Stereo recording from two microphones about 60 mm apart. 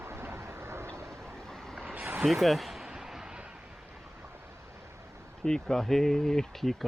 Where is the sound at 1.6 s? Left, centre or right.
Centre.